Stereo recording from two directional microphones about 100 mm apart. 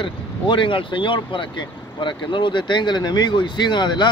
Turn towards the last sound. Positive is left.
turn(degrees=50)  # may be behind; listen again after turning